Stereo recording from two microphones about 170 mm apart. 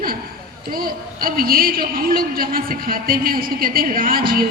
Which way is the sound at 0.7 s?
60° right (ahead or behind).